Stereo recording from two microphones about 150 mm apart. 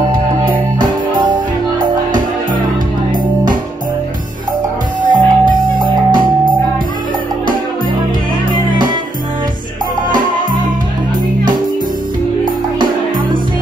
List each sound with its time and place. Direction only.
0.1 s music: 30° right (ahead or behind)
5.1 s music: 30° right (ahead or behind)
12.7 s music: 30° right (ahead or behind)